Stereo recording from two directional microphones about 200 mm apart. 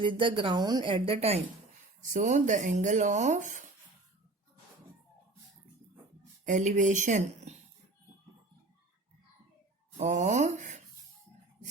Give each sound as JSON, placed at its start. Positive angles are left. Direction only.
{"t": 0.0, "sound": "a woman's voice", "side_deg": -25}
{"t": 6.4, "sound": "speech", "side_deg": -40}
{"t": 10.0, "sound": "speech", "side_deg": -35}